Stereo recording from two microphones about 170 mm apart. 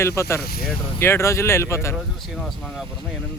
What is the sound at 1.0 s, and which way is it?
Speech, 15° left (ahead or behind).